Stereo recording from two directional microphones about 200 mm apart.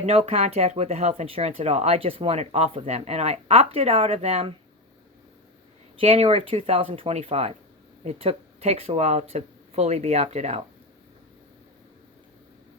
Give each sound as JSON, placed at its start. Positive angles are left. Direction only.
{"t": 0.0, "sound": "speech", "side_deg": -30}
{"t": 6.0, "sound": "speech", "side_deg": -30}